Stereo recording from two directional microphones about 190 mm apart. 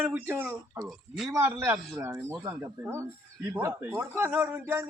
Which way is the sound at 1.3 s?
15° right (ahead or behind).